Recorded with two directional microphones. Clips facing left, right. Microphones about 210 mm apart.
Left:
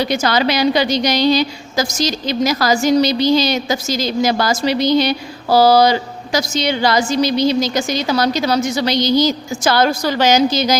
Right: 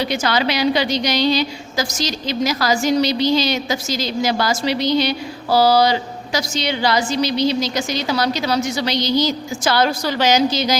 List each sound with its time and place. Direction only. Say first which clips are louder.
0.0 s a woman's voice: left 3 dB; 40° left (ahead or behind)